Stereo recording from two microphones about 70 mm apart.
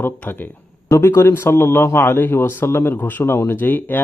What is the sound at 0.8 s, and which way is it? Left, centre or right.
Speech, left.